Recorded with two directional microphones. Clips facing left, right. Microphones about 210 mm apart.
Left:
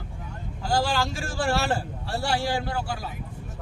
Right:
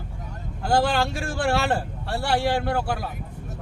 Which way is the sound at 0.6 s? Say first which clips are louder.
Right 4 dB; 55° right (ahead or behind).